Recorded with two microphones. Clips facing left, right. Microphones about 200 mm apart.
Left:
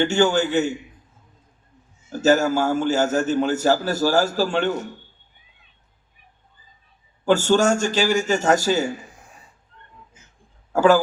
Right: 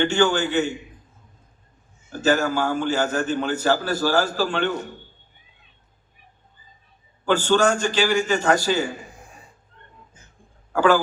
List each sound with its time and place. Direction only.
0.0 s a man's voice: 45° left (ahead or behind)
2.2 s a man's voice: 45° left (ahead or behind)
7.3 s a man's voice: 45° left (ahead or behind)
10.8 s a man's voice: 45° left (ahead or behind)